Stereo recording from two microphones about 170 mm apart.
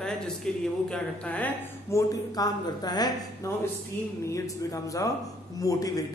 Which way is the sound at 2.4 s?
25° left (ahead or behind).